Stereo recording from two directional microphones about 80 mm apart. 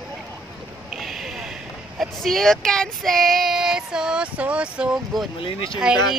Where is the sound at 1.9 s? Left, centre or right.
Centre.